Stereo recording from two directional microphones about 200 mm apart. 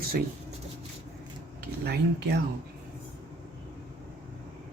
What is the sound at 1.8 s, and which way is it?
Speech, 55° right (ahead or behind).